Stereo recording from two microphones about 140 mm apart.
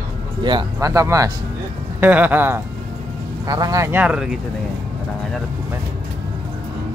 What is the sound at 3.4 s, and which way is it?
Speech, 25° right (ahead or behind).